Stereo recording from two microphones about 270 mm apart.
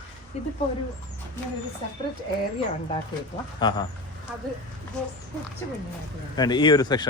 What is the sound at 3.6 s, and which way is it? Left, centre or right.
Speech, centre.